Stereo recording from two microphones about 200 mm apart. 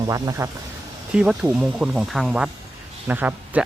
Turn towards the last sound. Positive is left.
turn(degrees=-10)  # may be behind; listen again after turning